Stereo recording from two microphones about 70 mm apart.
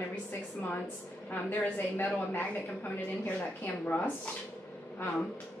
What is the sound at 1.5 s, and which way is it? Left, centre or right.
Speech, left.